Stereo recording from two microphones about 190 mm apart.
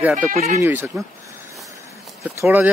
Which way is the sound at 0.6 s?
10° right (ahead or behind).